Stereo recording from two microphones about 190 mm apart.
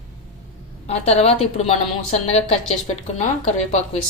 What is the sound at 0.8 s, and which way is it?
Speech, 35° left (ahead or behind).